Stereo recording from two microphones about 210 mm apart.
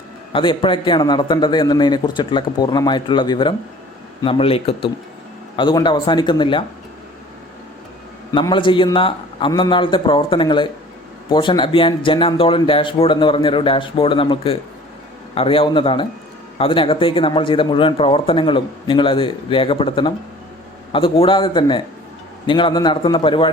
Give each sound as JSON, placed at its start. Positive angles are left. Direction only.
{"t": 0.3, "sound": "speech", "side_deg": 25}
{"t": 8.3, "sound": "speech", "side_deg": 20}